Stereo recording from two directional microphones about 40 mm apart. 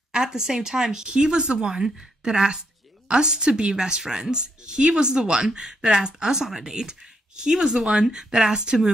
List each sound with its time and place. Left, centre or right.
0.1 s a woman's voice: centre